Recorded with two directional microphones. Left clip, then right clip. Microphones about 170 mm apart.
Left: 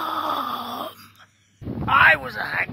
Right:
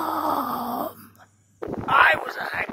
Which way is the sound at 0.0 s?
45° right (ahead or behind).